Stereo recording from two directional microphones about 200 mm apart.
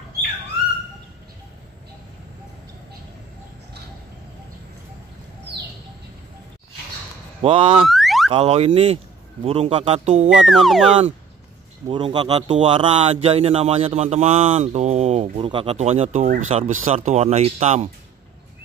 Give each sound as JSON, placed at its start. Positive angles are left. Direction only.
{"t": 7.4, "sound": "speech", "side_deg": -25}
{"t": 7.9, "sound": "car alarm", "side_deg": 0}
{"t": 8.3, "sound": "speech", "side_deg": -30}
{"t": 10.3, "sound": "speech", "side_deg": 0}
{"t": 11.9, "sound": "speech", "side_deg": -25}